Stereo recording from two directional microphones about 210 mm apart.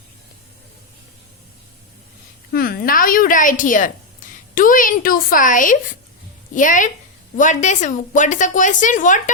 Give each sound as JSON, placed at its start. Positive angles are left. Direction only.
{"t": 2.5, "sound": "a woman's voice", "side_deg": 45}